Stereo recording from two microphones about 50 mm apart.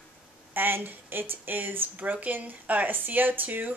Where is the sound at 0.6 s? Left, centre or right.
Right.